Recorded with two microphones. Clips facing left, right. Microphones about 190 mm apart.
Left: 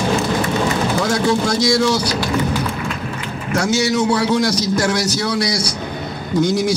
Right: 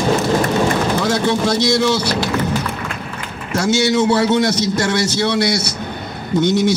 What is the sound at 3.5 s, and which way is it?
A man's voice, 25° right (ahead or behind).